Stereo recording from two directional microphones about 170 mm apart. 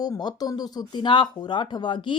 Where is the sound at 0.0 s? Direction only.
25° left (ahead or behind).